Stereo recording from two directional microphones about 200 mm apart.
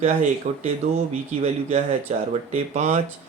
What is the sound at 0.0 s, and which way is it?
Speech, 35° right (ahead or behind).